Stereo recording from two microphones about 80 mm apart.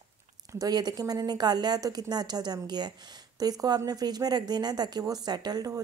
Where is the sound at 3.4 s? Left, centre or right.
Right.